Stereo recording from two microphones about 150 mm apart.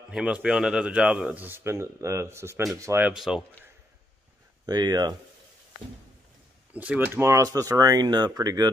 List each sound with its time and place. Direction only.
0.1 s speech: 5° right (ahead or behind)
3.1 s speech: 5° right (ahead or behind)
4.6 s speech: 25° right (ahead or behind)
6.7 s speech: 10° right (ahead or behind); by 8.6 s 25° right (ahead or behind)